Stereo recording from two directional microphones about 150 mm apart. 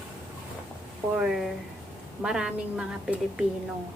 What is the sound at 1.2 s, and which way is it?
A woman's voice, 5° right (ahead or behind).